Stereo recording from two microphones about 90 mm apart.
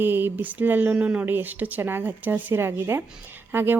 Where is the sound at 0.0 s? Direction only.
25° right (ahead or behind).